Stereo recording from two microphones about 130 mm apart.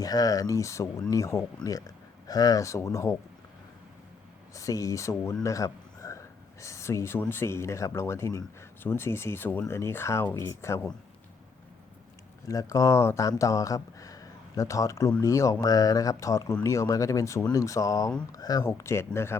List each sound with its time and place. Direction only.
0.0 s speech: 30° left (ahead or behind)
4.5 s speech: 25° left (ahead or behind)
12.5 s speech: 25° left (ahead or behind)